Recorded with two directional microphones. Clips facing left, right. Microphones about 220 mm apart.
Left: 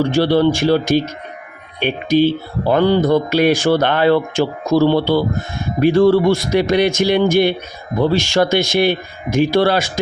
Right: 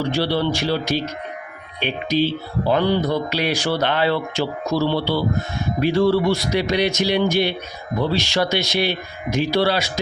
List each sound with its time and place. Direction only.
0.0 s speech: 50° left (ahead or behind)